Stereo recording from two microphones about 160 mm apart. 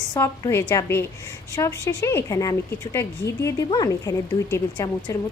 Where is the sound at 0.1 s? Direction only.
20° left (ahead or behind).